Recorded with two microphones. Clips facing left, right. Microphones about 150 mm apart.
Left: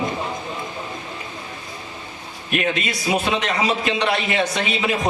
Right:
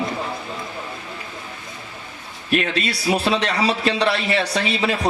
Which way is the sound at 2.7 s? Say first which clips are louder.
Right 1 dB; 35° right (ahead or behind).